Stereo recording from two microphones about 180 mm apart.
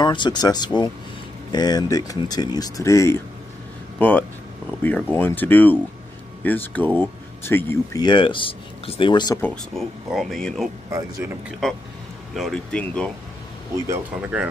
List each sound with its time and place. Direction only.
0.0 s speech: 25° left (ahead or behind)
9.4 s speech: centre (ahead or behind)
10.9 s speech: 15° right (ahead or behind)
12.4 s speech: 5° left (ahead or behind)
13.8 s speech: 5° right (ahead or behind)